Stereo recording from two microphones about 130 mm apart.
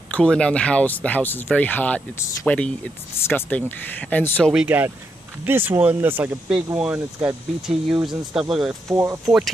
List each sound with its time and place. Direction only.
0.1 s speech: 5° left (ahead or behind)
4.5 s speech: 10° right (ahead or behind)
8.8 s speech: 25° right (ahead or behind)
9.2 s speech: centre (ahead or behind)